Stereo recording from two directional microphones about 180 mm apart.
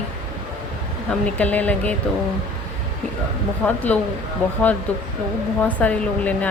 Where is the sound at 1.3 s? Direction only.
10° left (ahead or behind).